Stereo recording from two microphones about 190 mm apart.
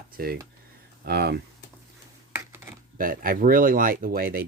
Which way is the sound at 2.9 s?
50° right (ahead or behind).